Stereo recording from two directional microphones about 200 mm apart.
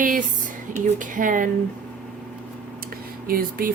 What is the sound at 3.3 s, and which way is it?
Speech, 45° right (ahead or behind).